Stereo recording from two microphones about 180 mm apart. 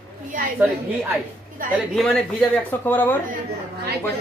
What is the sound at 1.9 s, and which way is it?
Speech, 5° left (ahead or behind).